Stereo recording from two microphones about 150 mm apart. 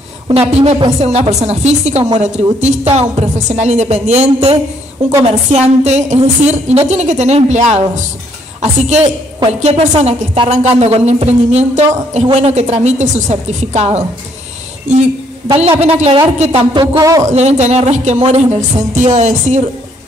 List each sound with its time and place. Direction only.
0.3 s a woman's voice: 40° right (ahead or behind)
15.8 s a woman's voice: 45° right (ahead or behind)
16.8 s a man's voice: 20° right (ahead or behind)
17.3 s a woman's voice: 50° right (ahead or behind)